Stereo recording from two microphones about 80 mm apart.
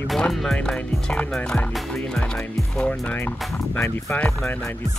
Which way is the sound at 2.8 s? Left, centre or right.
Centre.